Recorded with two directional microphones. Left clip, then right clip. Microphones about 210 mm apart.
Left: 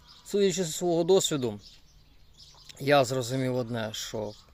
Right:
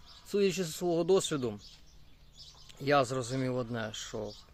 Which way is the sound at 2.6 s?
25° left (ahead or behind).